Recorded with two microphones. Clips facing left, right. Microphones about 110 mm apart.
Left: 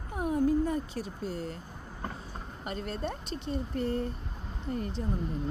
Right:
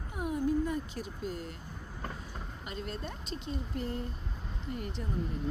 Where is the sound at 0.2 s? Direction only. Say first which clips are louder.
Left 4 dB; 40° left (ahead or behind).